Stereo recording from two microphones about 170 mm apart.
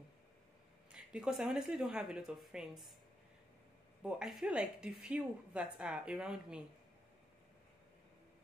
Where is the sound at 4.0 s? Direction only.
5° right (ahead or behind).